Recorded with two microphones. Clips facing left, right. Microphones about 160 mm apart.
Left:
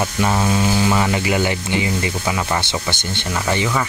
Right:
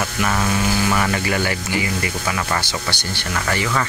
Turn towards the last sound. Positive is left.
turn(degrees=20)  # may be behind; listen again after turning